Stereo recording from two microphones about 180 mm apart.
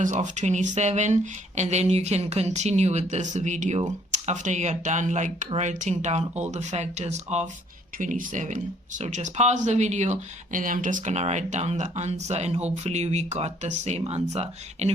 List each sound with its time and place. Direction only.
0.0 s speech: 40° right (ahead or behind)